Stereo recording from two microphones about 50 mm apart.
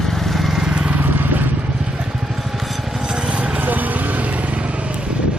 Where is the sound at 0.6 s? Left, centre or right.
Right.